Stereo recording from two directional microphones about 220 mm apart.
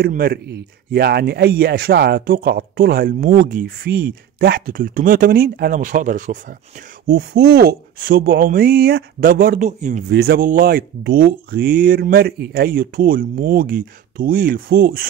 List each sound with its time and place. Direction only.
0.0 s speech: 45° right (ahead or behind)